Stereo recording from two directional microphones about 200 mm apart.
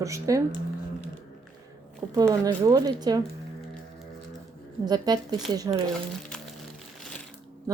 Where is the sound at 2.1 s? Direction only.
15° right (ahead or behind).